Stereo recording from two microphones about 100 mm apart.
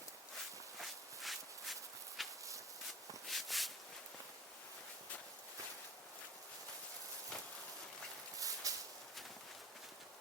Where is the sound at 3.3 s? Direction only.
Centre (ahead or behind).